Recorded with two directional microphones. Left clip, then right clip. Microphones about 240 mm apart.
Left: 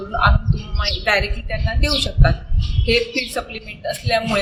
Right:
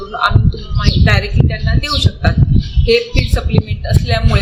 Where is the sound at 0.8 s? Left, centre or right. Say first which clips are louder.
Right 2 dB; centre.